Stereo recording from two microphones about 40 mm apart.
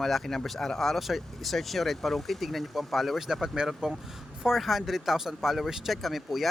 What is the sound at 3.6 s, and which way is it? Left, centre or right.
Speech, centre.